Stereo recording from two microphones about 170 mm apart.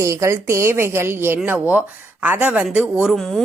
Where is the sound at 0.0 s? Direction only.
15° right (ahead or behind).